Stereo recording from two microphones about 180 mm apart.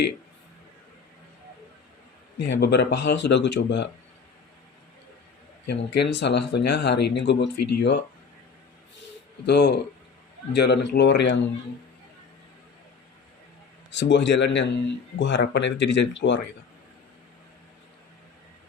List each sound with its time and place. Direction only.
2.4 s speech: 75° left (ahead or behind)
5.6 s speech: 70° left (ahead or behind)
9.5 s speech: 70° left (ahead or behind)
13.9 s speech: 80° left